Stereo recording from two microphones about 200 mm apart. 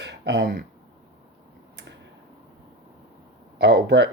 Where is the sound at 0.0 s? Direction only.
60° right (ahead or behind).